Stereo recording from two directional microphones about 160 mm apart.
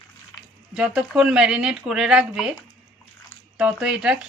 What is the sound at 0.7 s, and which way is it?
Speech, 5° right (ahead or behind).